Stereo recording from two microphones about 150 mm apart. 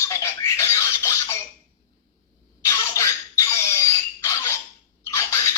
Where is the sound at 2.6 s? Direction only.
20° left (ahead or behind).